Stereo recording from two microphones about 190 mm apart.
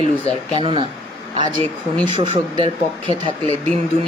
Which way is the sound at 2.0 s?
35° left (ahead or behind).